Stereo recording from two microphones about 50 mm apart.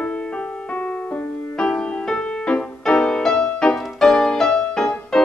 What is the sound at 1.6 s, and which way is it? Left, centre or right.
Music, centre.